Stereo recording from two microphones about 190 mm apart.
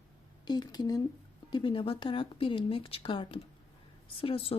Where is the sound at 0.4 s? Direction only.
20° left (ahead or behind).